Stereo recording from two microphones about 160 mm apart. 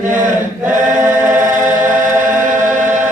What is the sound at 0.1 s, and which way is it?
Choir, 55° right (ahead or behind).